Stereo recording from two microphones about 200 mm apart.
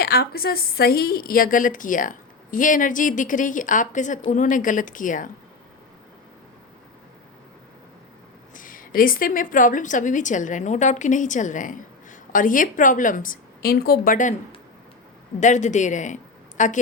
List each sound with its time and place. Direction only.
0.0 s a woman's voice: 50° left (ahead or behind)
8.5 s a woman's voice: 40° left (ahead or behind)
15.4 s a woman's voice: 35° left (ahead or behind)